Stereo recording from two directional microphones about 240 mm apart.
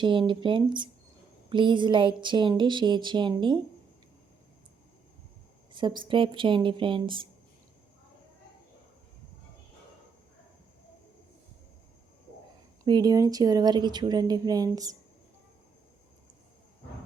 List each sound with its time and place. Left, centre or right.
0.0 s speech: right
5.7 s speech: centre
12.8 s speech: centre